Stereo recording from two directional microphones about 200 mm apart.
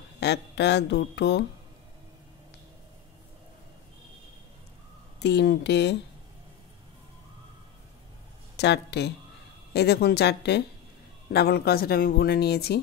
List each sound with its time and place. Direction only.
0.2 s speech: 60° left (ahead or behind)
5.2 s speech: 55° left (ahead or behind)
8.5 s speech: 55° left (ahead or behind)